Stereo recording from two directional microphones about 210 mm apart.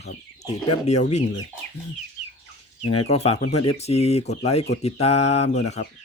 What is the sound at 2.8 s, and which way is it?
Speech, 90° left.